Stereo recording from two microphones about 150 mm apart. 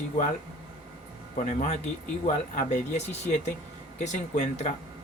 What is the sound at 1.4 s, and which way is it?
Speech, 50° left (ahead or behind).